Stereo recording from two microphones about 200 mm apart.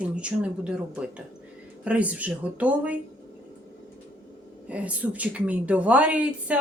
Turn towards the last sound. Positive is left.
turn(degrees=-5)  # may be behind; listen again after turning